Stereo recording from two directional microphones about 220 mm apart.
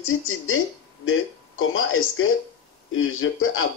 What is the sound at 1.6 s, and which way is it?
Speech, 65° left (ahead or behind).